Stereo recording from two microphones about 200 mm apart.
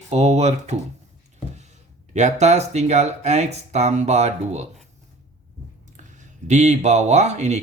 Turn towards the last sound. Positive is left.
turn(degrees=-35)  # may be behind; listen again after turning